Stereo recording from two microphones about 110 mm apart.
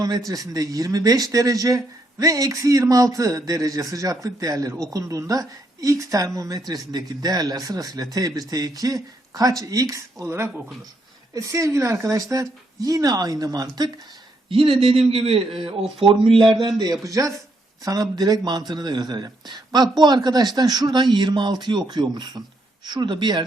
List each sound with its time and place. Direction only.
0.3 s speech: 35° right (ahead or behind)
14.5 s a man's voice: 55° right (ahead or behind)
16.6 s speech: 40° right (ahead or behind)